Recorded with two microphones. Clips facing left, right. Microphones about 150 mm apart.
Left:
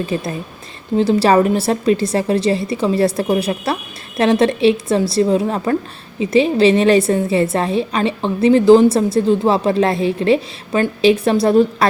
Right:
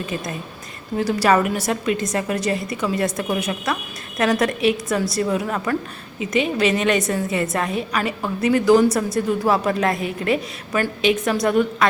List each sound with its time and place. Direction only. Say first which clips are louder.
0.0 s a woman's voice: left 6 dB; 30° left (ahead or behind)